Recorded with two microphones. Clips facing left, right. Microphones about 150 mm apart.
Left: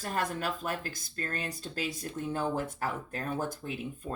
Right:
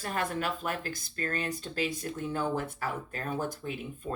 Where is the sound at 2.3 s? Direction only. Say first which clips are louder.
Even; 45° left (ahead or behind).